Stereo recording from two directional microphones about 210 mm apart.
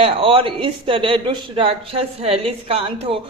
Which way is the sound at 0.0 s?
25° right (ahead or behind).